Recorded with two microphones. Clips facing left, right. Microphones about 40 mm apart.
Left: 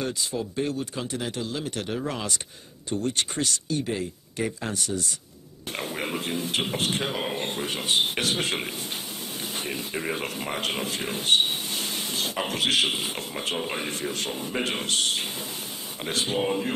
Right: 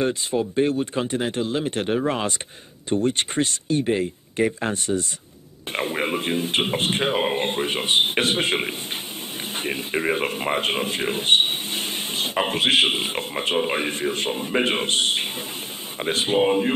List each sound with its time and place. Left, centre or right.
0.0 s speech: right